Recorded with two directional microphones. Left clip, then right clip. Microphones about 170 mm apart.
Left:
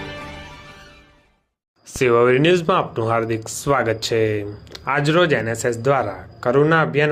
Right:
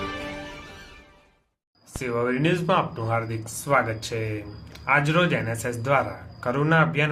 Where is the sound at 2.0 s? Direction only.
55° left (ahead or behind).